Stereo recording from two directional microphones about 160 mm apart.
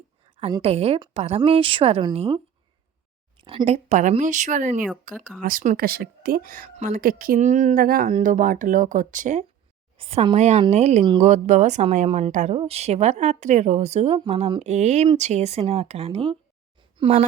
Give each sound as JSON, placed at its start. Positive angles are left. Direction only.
{"t": 0.3, "sound": "a sound", "side_deg": -35}
{"t": 0.6, "sound": "a woman's voice", "side_deg": -40}
{"t": 10.0, "sound": "a woman's voice", "side_deg": -35}